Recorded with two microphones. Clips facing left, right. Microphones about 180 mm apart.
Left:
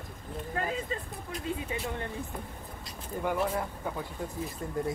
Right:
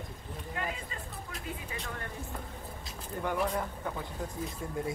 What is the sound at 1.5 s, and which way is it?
Speech, 25° left (ahead or behind).